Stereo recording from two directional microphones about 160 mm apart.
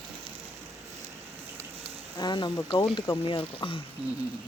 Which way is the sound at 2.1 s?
25° left (ahead or behind).